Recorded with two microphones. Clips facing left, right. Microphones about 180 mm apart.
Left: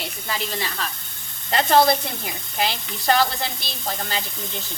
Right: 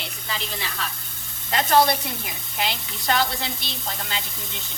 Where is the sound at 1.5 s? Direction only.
30° left (ahead or behind).